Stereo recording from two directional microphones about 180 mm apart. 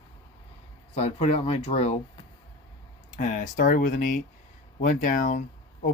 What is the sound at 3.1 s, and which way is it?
Speech, 45° left (ahead or behind).